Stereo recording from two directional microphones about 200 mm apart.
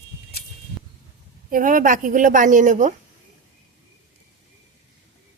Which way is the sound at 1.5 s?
45° right (ahead or behind).